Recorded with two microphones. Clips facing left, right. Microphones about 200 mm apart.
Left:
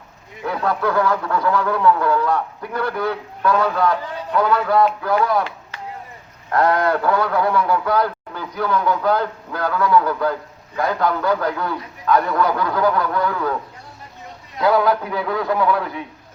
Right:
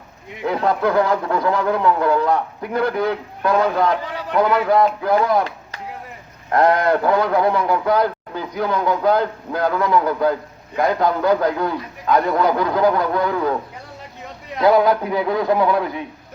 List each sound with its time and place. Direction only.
0.4 s a man's voice: 20° right (ahead or behind)
4.1 s a sound: 90° right
4.4 s a man's voice: 20° right (ahead or behind)
6.5 s a man's voice: 20° right (ahead or behind)
14.6 s a man's voice: 15° right (ahead or behind)